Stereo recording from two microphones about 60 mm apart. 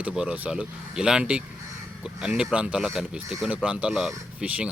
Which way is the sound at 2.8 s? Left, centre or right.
Centre.